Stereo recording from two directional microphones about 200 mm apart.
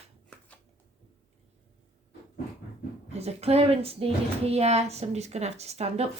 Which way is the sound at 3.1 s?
30° right (ahead or behind).